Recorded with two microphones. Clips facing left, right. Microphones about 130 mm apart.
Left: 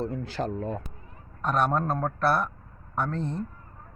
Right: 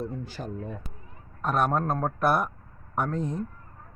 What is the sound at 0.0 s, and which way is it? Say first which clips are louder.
Speech: left 4 dB; 90° left.